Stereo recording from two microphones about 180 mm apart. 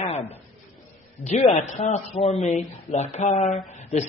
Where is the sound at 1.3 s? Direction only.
40° left (ahead or behind).